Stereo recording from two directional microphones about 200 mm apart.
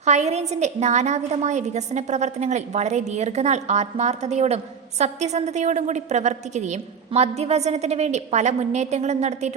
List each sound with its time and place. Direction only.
0.0 s a woman's voice: 35° right (ahead or behind)